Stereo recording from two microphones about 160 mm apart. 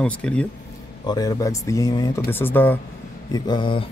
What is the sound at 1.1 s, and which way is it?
Speech, 20° left (ahead or behind).